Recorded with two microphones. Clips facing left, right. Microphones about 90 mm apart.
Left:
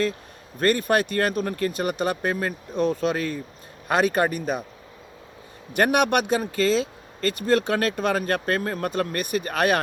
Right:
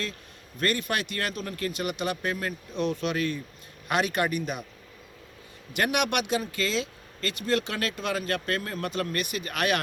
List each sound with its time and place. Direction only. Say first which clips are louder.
0.6 s speech: left 7 dB; 40° left (ahead or behind)
5.7 s speech: left 6 dB; 45° left (ahead or behind)